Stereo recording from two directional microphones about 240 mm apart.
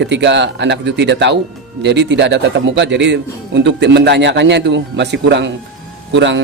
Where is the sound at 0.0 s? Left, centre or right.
Right.